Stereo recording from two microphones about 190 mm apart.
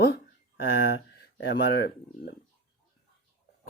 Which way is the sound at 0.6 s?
65° left (ahead or behind).